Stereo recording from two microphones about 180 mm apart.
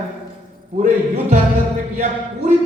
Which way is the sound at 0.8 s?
45° right (ahead or behind).